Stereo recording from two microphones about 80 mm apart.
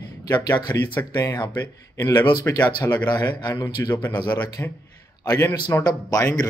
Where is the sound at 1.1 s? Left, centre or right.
Left.